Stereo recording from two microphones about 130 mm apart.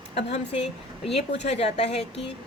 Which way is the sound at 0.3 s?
50° left (ahead or behind).